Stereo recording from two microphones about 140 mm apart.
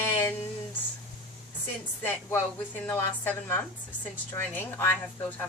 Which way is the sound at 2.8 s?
15° left (ahead or behind).